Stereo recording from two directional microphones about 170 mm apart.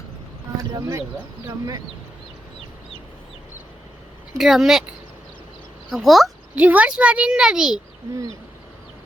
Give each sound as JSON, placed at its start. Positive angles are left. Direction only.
{"t": 0.5, "sound": "speech", "side_deg": -20}
{"t": 4.4, "sound": "speech", "side_deg": 0}
{"t": 5.9, "sound": "speech", "side_deg": 0}